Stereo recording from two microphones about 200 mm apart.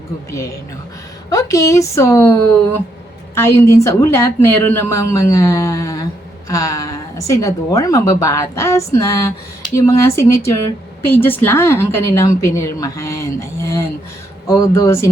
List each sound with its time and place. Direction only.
1.3 s a woman's voice: 15° left (ahead or behind)
3.3 s a woman's voice: 15° left (ahead or behind)